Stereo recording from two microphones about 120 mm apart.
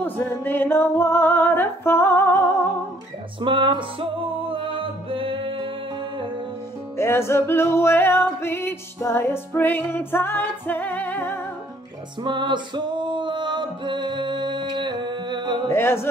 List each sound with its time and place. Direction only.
0.0 s a sound: 15° left (ahead or behind)
3.3 s music: 45° right (ahead or behind)
7.0 s music: 20° left (ahead or behind)
12.2 s music: 40° right (ahead or behind)
15.7 s music: 20° left (ahead or behind)